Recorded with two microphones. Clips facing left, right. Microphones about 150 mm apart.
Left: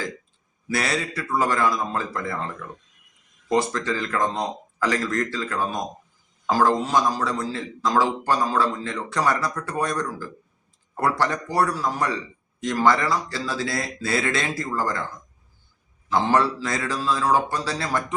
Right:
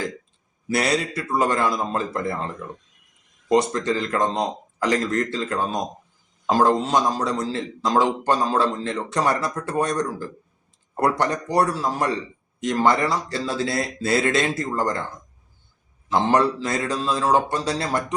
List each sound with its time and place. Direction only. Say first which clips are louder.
0.7 s a man's voice: right 3 dB; 20° right (ahead or behind)
16.0 s a man's voice: right 1 dB; 20° right (ahead or behind)